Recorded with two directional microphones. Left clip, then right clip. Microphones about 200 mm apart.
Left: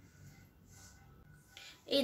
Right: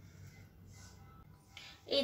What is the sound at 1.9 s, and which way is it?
Speech, 10° left (ahead or behind).